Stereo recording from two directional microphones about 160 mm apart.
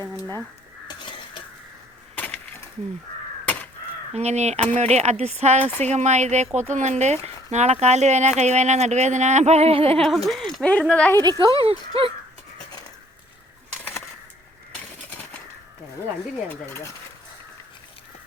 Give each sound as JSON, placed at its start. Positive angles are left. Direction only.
{"t": 0.9, "sound": "crow", "side_deg": 30}
{"t": 2.1, "sound": "breaking", "side_deg": 10}
{"t": 3.4, "sound": "crow", "side_deg": 10}
{"t": 4.1, "sound": "speech", "side_deg": -45}
{"t": 10.0, "sound": "speech", "side_deg": 0}
{"t": 11.2, "sound": "speech", "side_deg": -25}
{"t": 16.5, "sound": "speech", "side_deg": 15}